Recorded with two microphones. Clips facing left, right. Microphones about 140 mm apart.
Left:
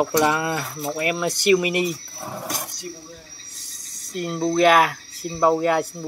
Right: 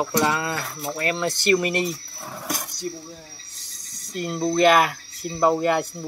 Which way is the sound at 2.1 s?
25° left (ahead or behind).